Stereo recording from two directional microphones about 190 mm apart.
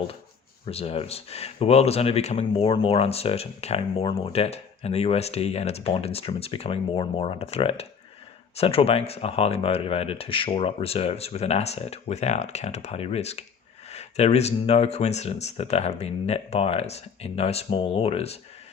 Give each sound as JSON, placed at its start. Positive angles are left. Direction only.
{"t": 0.6, "sound": "speech", "side_deg": 30}